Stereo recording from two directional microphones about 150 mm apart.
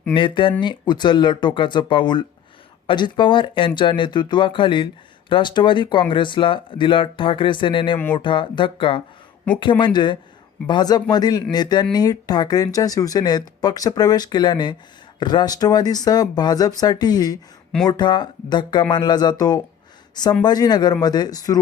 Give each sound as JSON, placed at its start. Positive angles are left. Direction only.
{"t": 0.1, "sound": "speech", "side_deg": 35}